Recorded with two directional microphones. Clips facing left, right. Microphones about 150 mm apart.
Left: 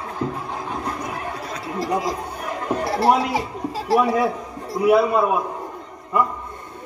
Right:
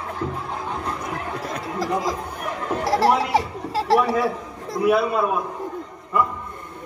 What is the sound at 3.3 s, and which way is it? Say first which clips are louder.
Speech: right 3 dB; 75° right (ahead or behind).